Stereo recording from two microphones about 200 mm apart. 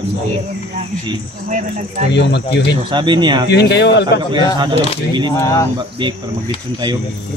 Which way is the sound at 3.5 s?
55° left (ahead or behind).